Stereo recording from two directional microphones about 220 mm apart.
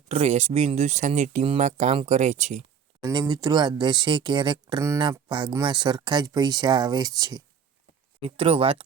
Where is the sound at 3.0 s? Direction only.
20° right (ahead or behind).